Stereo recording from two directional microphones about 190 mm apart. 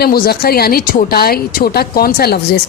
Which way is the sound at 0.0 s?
55° left (ahead or behind).